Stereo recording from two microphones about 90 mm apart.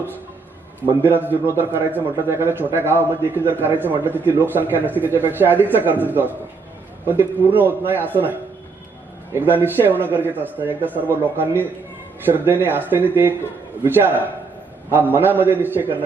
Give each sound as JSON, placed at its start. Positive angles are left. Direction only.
{"t": 0.9, "sound": "a man's voice", "side_deg": -25}